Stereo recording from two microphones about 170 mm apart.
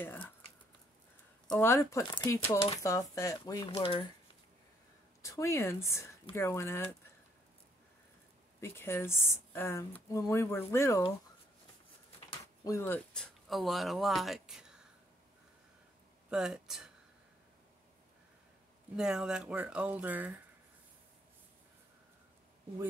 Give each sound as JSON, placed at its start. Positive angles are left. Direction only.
{"t": 0.0, "sound": "speech", "side_deg": 10}
{"t": 1.6, "sound": "speech", "side_deg": 15}
{"t": 5.2, "sound": "speech", "side_deg": 20}
{"t": 8.5, "sound": "speech", "side_deg": 15}
{"t": 12.6, "sound": "speech", "side_deg": 15}
{"t": 16.3, "sound": "speech", "side_deg": -5}
{"t": 18.9, "sound": "speech", "side_deg": -5}